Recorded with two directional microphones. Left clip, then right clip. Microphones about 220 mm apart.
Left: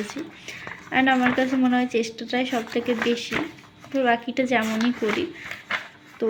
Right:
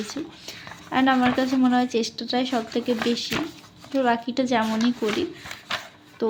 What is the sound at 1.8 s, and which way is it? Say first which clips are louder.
Speech: even; 15° right (ahead or behind).